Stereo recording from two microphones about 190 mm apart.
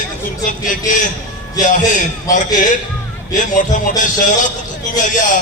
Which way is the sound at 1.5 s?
40° left (ahead or behind).